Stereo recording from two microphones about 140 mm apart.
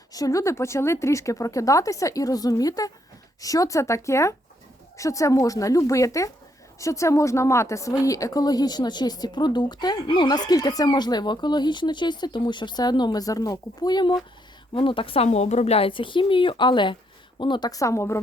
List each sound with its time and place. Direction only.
0.1 s a woman's voice: 25° left (ahead or behind)